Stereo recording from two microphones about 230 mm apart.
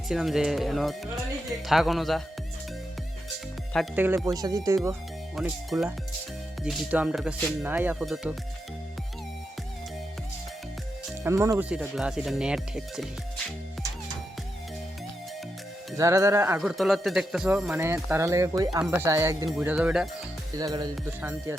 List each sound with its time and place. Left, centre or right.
0.1 s speech: centre
3.9 s speech: centre
11.2 s speech: centre
11.8 s speech: centre
16.0 s speech: centre
16.6 s speech: centre
19.5 s speech: centre
20.6 s speech: centre